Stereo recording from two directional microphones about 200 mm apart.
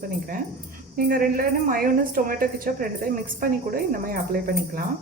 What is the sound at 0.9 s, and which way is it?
A woman's voice, 45° right (ahead or behind).